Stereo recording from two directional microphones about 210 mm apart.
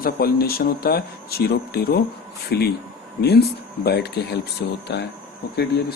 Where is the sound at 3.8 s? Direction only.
50° left (ahead or behind).